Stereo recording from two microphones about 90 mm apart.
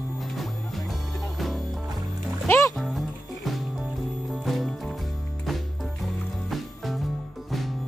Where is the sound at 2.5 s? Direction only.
35° left (ahead or behind).